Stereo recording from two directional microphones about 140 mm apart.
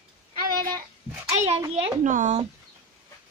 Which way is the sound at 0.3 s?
90° right.